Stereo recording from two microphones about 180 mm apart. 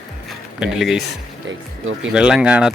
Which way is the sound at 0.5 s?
5° right (ahead or behind).